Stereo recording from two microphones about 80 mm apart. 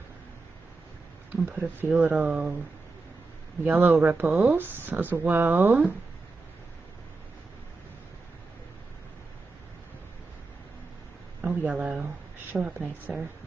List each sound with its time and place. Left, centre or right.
1.6 s speech: right
3.6 s speech: right
11.4 s speech: centre